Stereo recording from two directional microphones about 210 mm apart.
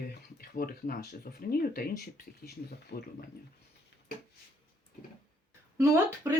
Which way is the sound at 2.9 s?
45° left (ahead or behind).